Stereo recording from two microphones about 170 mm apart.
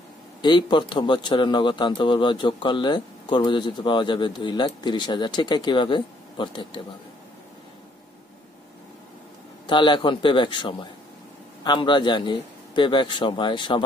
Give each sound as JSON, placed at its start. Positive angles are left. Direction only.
{"t": 0.4, "sound": "a man's voice", "side_deg": 25}
{"t": 9.7, "sound": "a man's voice", "side_deg": 30}